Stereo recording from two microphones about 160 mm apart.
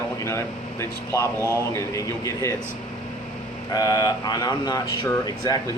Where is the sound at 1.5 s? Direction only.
20° left (ahead or behind).